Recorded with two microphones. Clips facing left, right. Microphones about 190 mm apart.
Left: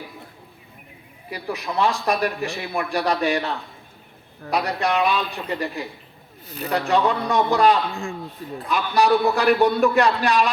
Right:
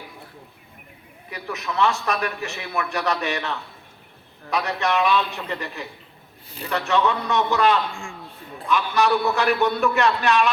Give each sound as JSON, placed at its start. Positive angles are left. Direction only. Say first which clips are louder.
{"t": 1.3, "sound": "a man's voice", "louder": "left 2 dB", "side_deg": 35}